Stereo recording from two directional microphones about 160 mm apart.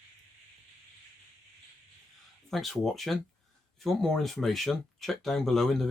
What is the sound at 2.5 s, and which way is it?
Speech, centre (ahead or behind).